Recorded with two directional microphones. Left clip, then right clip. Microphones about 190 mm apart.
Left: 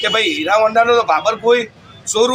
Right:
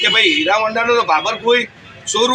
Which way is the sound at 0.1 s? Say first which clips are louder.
Right 2 dB; 25° left (ahead or behind).